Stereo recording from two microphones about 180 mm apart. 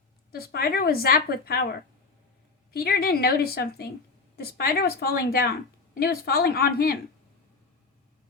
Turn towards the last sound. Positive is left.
turn(degrees=60)  # may be behind; listen again after turning